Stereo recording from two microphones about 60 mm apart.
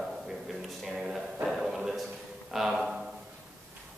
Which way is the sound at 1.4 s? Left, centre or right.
Centre.